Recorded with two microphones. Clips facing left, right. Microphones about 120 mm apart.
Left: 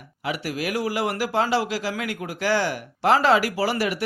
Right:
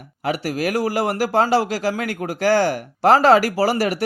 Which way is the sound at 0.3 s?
45° right (ahead or behind).